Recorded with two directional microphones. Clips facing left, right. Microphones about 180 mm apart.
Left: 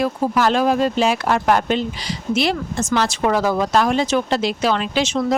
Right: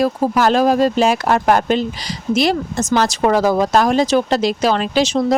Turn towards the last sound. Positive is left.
turn(degrees=-35)  # may be behind; listen again after turning